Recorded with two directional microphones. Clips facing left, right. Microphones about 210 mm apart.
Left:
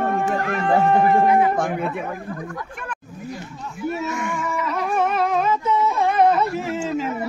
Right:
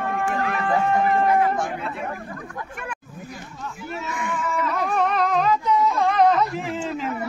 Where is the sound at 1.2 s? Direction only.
10° left (ahead or behind).